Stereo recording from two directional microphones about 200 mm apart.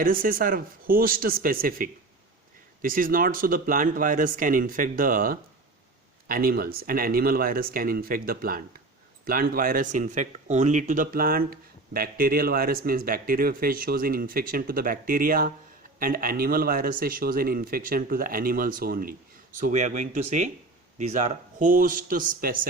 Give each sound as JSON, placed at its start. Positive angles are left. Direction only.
{"t": 0.0, "sound": "speech", "side_deg": -45}